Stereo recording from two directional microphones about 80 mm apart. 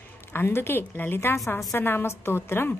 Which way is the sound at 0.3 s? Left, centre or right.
Left.